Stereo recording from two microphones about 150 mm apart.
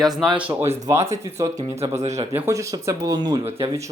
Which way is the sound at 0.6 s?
45° right (ahead or behind).